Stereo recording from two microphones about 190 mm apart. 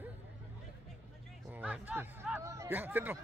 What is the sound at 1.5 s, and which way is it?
Speech, 10° right (ahead or behind).